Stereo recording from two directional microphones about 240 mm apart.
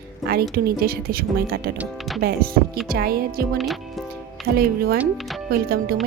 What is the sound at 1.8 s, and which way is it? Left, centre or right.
Speech, centre.